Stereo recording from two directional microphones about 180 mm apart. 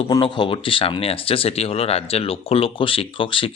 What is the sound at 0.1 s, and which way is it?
Speech, 25° left (ahead or behind).